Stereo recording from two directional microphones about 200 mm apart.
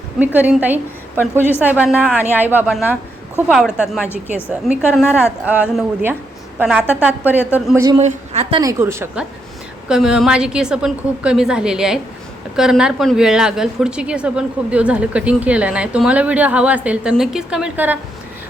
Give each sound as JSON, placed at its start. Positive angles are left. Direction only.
{"t": 0.3, "sound": "a woman's voice", "side_deg": -10}
{"t": 7.9, "sound": "a woman's voice", "side_deg": -30}
{"t": 8.6, "sound": "a woman's voice", "side_deg": -15}